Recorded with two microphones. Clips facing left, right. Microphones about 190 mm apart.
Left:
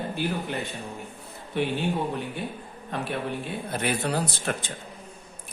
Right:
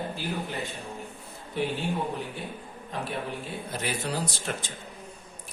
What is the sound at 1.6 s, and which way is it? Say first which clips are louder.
Speech: left 2 dB; 60° left (ahead or behind).